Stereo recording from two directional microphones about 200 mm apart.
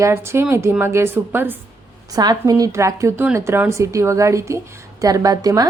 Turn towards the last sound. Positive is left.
turn(degrees=-20)  # may be behind; listen again after turning